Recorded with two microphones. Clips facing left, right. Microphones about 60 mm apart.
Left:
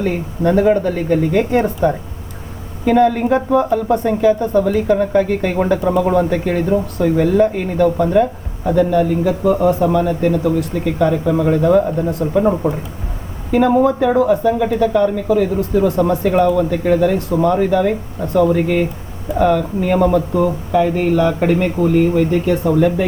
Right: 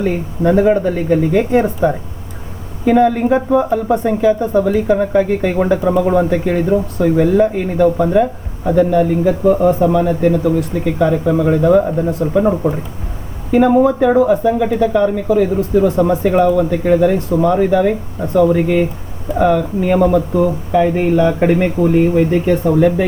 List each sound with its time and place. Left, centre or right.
0.0 s speech: centre
13.7 s speech: centre
20.7 s speech: right